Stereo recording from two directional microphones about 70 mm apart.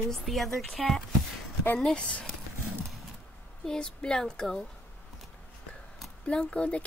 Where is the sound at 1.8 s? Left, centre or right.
Centre.